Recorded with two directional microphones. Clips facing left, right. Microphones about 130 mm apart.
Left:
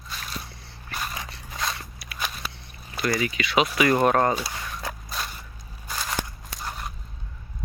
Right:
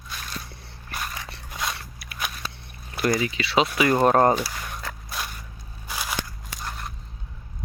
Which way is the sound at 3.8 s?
10° right (ahead or behind).